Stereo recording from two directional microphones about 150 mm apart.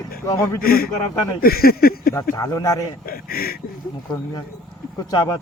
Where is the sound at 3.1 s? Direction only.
90° left.